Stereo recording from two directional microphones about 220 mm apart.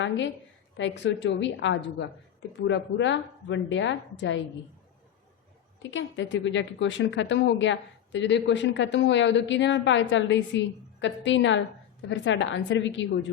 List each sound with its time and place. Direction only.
0.8 s a woman's voice: 55° left (ahead or behind)
5.9 s a woman's voice: 55° left (ahead or behind)